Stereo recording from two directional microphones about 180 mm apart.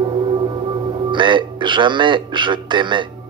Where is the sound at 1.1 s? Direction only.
25° right (ahead or behind).